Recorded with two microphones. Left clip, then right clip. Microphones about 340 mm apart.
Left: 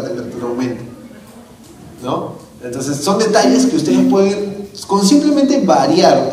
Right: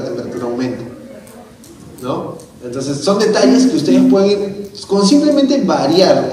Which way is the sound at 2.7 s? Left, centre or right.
Left.